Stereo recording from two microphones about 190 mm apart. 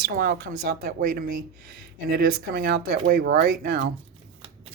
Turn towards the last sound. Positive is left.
turn(degrees=-60)  # may be behind; listen again after turning